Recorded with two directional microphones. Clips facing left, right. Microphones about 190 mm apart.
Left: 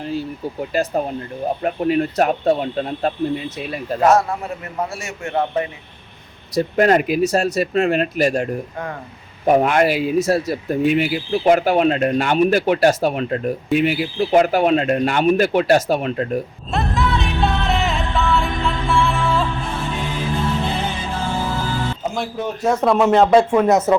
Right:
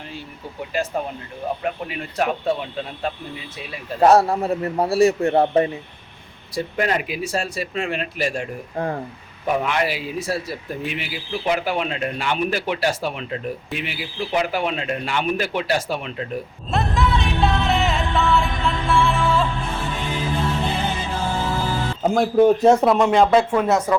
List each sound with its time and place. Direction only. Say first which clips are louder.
0.7 s speech: left 4 dB; 35° left (ahead or behind)
4.0 s a man's voice: right 2 dB; 35° right (ahead or behind)
6.5 s speech: left 7 dB; 45° left (ahead or behind)
9.5 s speech: left 7 dB; 45° left (ahead or behind)
16.7 s music: left 1 dB; centre (ahead or behind)
22.0 s speech: right 9 dB; 50° right (ahead or behind)
22.8 s speech: left 2 dB; centre (ahead or behind)
23.7 s speech: left 3 dB; 20° left (ahead or behind)